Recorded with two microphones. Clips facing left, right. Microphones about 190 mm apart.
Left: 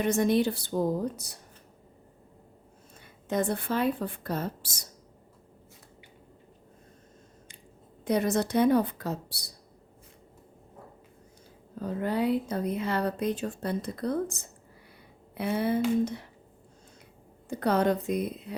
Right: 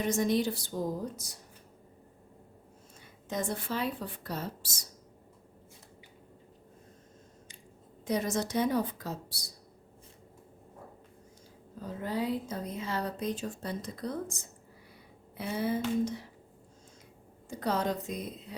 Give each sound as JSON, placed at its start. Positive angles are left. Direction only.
{"t": 0.0, "sound": "a woman's voice", "side_deg": 60}
{"t": 3.2, "sound": "a woman's voice", "side_deg": 60}
{"t": 8.0, "sound": "a woman's voice", "side_deg": 60}
{"t": 11.8, "sound": "a woman's voice", "side_deg": 65}
{"t": 17.5, "sound": "a woman's voice", "side_deg": 60}